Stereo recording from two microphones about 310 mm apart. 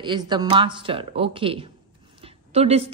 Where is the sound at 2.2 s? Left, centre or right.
Centre.